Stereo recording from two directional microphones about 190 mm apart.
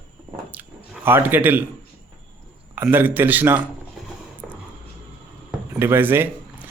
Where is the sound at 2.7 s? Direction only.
10° right (ahead or behind).